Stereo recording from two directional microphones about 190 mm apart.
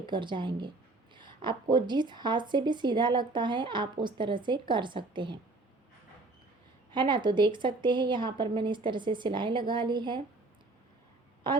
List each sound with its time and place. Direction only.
0.0 s a woman's voice: 25° right (ahead or behind)
6.9 s a woman's voice: 25° right (ahead or behind)
11.4 s a woman's voice: 25° right (ahead or behind)